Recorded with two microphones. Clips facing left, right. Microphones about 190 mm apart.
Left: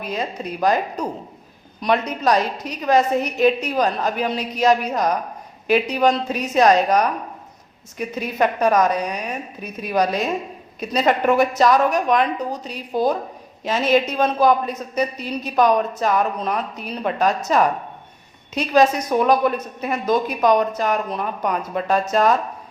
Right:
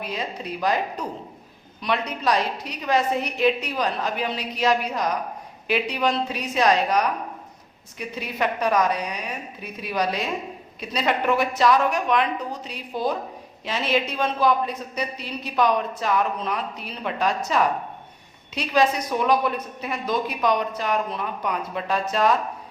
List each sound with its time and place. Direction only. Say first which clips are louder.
0.0 s a woman's voice: left 4 dB; 45° left (ahead or behind)